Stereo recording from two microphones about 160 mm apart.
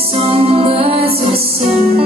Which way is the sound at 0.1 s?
40° right (ahead or behind).